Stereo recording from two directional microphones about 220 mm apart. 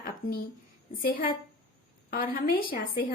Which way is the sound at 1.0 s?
40° left (ahead or behind).